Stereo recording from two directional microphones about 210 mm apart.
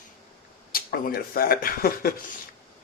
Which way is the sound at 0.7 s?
45° left (ahead or behind).